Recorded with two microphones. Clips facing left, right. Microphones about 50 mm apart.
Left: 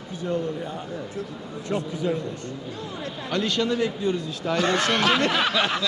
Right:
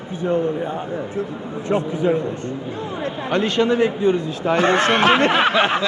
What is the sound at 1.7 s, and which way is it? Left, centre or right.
Speech, right.